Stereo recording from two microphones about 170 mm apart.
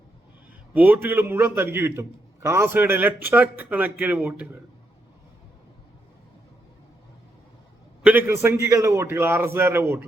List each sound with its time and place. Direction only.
0.7 s a man's voice: 10° right (ahead or behind)
8.0 s a man's voice: 10° right (ahead or behind)